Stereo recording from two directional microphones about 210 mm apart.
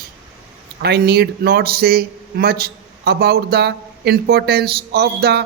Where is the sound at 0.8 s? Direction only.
50° right (ahead or behind).